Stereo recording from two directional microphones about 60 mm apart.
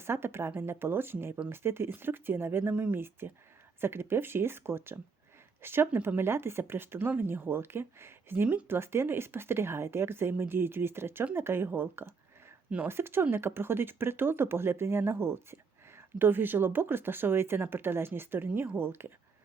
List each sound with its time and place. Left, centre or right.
0.0 s speech: right